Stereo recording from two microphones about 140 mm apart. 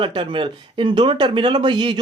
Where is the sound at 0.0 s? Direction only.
35° right (ahead or behind).